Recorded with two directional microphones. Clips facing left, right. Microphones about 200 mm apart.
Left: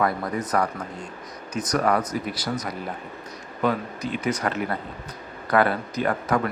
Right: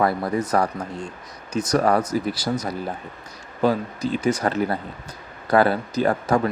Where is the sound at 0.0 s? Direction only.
30° right (ahead or behind).